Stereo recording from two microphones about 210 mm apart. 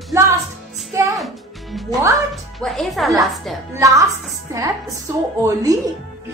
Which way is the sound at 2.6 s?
Centre (ahead or behind).